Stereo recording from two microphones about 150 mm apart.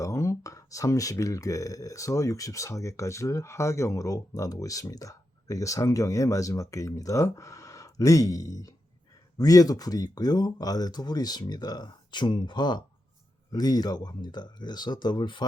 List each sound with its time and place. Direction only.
0.0 s speech: 20° left (ahead or behind)